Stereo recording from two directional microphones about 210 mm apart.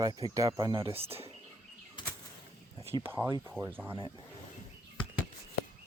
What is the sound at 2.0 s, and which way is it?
Bird flight, 20° left (ahead or behind).